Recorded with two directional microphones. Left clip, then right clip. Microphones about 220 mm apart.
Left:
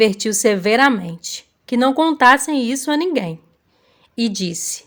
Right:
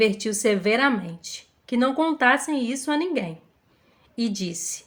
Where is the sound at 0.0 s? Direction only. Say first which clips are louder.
Left 6 dB; 40° left (ahead or behind).